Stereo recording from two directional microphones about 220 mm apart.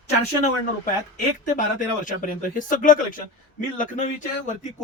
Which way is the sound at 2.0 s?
35° left (ahead or behind).